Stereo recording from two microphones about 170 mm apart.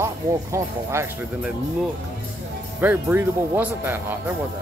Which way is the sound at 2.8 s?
10° right (ahead or behind).